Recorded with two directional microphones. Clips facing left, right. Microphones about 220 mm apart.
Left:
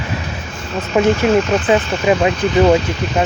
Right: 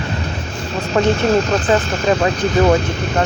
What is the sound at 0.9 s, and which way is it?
Speech, 10° left (ahead or behind).